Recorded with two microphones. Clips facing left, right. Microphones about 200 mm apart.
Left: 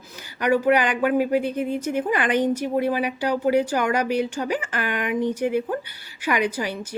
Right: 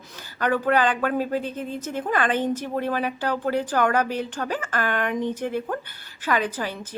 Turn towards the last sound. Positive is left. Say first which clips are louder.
# left 2 dB
turn(degrees=15)  # may be behind; listen again after turning